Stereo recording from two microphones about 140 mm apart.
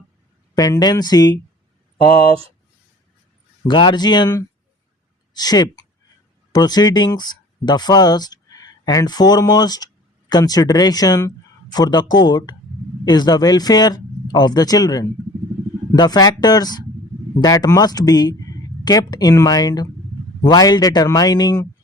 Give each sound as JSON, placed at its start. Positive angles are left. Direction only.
{"t": 0.5, "sound": "speech", "side_deg": 25}
{"t": 3.7, "sound": "speech", "side_deg": 30}